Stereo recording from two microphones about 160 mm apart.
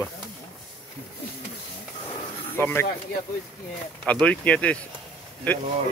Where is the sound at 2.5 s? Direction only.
15° left (ahead or behind).